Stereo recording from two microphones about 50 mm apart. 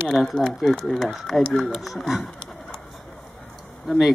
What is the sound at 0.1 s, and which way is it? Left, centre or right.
A woman's voice, centre.